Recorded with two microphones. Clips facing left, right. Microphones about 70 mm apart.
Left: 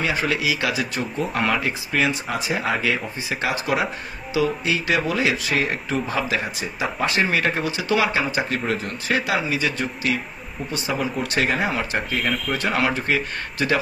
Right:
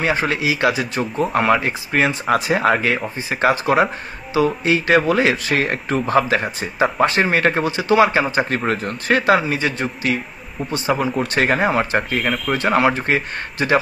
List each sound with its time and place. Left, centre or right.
0.0 s speech: right
2.2 s speech: right
7.7 s speech: right
12.2 s speech: centre
12.5 s speech: right